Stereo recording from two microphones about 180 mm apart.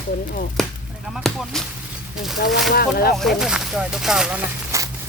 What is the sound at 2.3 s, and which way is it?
Speech, 55° left (ahead or behind).